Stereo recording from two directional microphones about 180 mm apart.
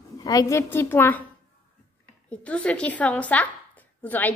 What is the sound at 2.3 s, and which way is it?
A woman's voice, 5° left (ahead or behind).